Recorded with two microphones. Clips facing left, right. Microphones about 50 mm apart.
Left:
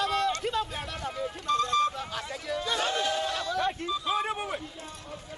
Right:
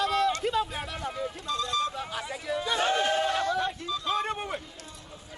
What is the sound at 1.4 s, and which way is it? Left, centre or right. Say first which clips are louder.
Music: left 5 dB; left.